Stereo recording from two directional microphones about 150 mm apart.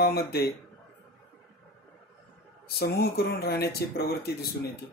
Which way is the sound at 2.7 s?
90° left.